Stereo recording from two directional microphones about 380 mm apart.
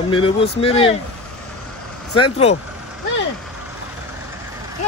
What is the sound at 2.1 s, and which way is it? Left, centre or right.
Speech, centre.